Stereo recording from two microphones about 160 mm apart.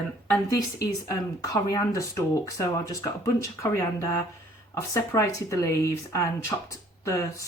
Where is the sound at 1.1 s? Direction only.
20° left (ahead or behind).